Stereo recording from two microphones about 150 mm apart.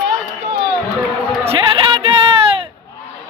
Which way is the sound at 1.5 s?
35° right (ahead or behind).